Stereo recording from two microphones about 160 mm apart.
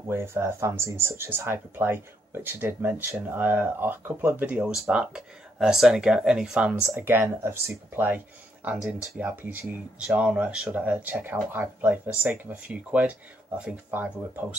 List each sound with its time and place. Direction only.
0.1 s speech: 15° right (ahead or behind)